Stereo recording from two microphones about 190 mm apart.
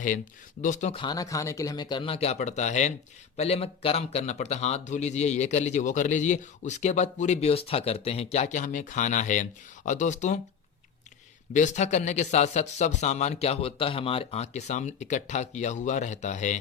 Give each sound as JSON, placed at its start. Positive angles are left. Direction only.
{"t": 0.6, "sound": "speech", "side_deg": 40}
{"t": 1.0, "sound": "speech", "side_deg": 20}
{"t": 11.5, "sound": "speech", "side_deg": 40}